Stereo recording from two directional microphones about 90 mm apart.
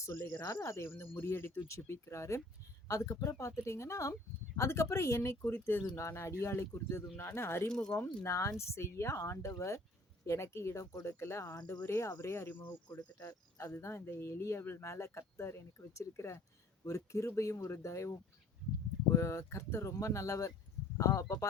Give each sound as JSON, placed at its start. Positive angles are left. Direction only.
{"t": 0.0, "sound": "speech", "side_deg": 35}
{"t": 7.7, "sound": "speech", "side_deg": 10}
{"t": 7.9, "sound": "speech", "side_deg": 25}
{"t": 13.7, "sound": "speech", "side_deg": 30}
{"t": 19.1, "sound": "speech", "side_deg": 35}